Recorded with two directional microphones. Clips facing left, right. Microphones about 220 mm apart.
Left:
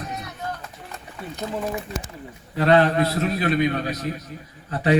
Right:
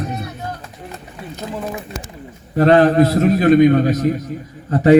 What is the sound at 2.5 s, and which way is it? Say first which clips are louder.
A man's voice: right 6 dB; 45° right (ahead or behind).